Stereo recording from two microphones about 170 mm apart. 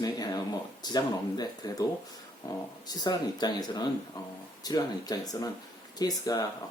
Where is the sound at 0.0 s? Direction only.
25° left (ahead or behind).